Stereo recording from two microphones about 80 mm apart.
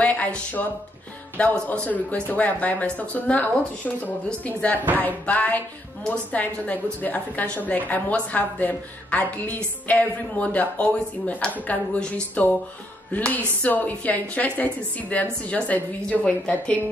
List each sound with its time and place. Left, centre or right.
0.0 s a woman's voice: centre